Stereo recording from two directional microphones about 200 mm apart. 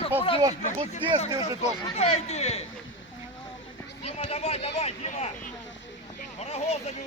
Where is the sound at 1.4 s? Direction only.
30° left (ahead or behind).